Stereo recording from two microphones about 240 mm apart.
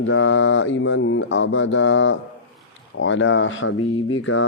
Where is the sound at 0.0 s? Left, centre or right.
Left.